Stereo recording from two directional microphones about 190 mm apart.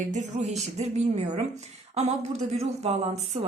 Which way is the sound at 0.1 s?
40° right (ahead or behind).